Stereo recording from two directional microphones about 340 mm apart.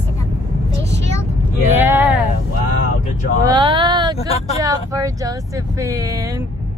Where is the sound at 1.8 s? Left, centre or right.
Centre.